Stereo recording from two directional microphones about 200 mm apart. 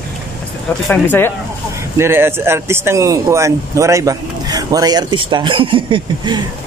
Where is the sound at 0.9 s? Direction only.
10° left (ahead or behind).